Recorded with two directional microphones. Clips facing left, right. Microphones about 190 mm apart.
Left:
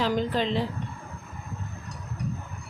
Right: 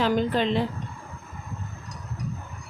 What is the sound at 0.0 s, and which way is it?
Speech, 60° right (ahead or behind).